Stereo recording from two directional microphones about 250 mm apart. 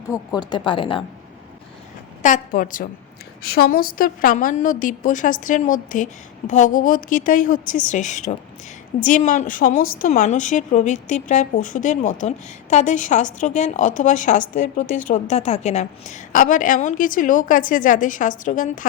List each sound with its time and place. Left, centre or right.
0.1 s a woman's voice: centre
2.2 s a woman's voice: left